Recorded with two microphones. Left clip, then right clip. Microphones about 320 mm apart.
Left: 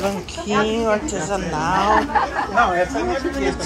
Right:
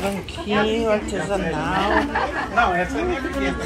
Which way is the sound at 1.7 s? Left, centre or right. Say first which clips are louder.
Left 4 dB; left.